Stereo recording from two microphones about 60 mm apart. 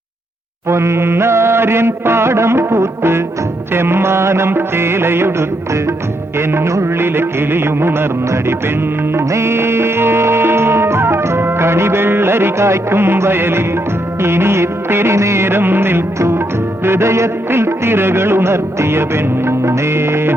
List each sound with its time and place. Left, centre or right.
0.7 s music: right